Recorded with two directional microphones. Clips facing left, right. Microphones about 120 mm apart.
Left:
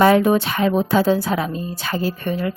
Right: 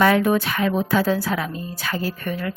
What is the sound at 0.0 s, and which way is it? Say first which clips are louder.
A woman's voice: left 3 dB; 25° left (ahead or behind).